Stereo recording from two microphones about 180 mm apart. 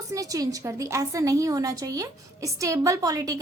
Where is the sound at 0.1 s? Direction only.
20° right (ahead or behind).